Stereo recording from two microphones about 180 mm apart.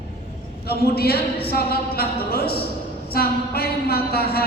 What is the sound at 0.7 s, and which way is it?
A woman's voice, 60° left (ahead or behind).